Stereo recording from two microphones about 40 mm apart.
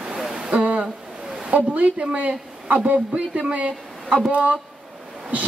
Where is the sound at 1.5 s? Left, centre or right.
Right.